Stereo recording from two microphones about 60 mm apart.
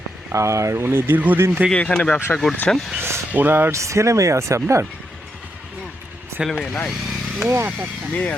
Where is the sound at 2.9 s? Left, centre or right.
Right.